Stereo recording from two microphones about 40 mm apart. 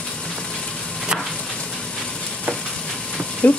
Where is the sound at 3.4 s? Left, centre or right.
Left.